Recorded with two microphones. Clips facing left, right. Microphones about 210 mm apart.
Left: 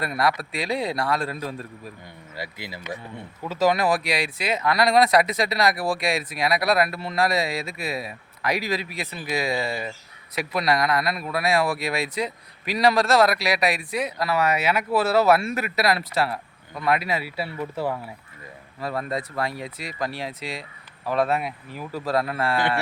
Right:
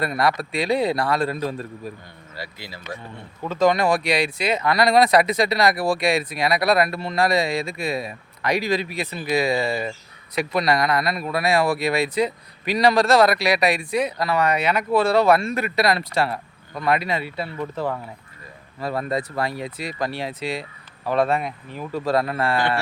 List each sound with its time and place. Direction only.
0.0 s speech: centre (ahead or behind)
2.3 s speech: 20° left (ahead or behind)
3.5 s speech: 5° left (ahead or behind)